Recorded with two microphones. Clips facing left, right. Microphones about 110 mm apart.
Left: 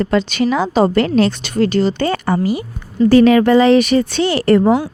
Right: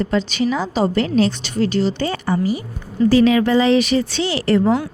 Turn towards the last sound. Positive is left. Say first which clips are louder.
# left 4 dB
turn(degrees=55)  # may be behind; listen again after turning